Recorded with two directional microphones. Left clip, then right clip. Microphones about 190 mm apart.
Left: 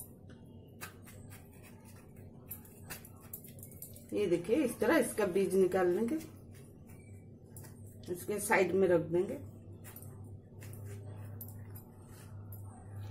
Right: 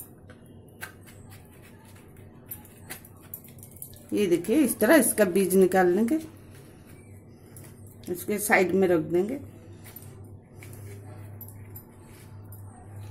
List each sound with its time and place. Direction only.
4.1 s speech: 40° right (ahead or behind)
8.3 s speech: 30° right (ahead or behind)